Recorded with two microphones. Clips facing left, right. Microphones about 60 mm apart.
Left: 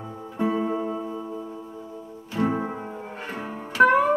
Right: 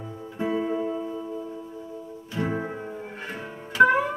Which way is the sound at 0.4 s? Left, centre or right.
Centre.